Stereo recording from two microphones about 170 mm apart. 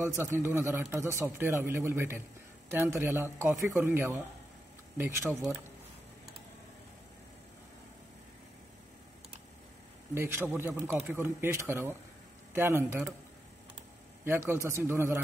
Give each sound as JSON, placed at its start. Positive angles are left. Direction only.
{"t": 0.0, "sound": "a man's voice", "side_deg": -15}
{"t": 10.1, "sound": "a man's voice", "side_deg": -15}
{"t": 14.2, "sound": "a man's voice", "side_deg": -15}